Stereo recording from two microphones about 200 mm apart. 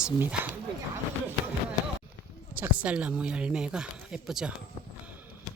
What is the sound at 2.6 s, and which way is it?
Speech, 5° right (ahead or behind).